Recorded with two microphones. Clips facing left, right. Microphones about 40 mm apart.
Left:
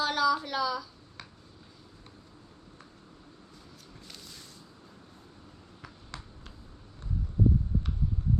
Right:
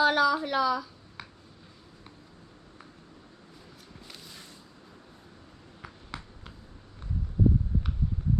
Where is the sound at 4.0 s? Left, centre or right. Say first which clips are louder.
Right 2 dB; centre.